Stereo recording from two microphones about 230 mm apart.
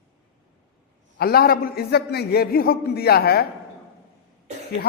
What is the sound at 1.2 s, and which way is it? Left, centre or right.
A man's voice, left.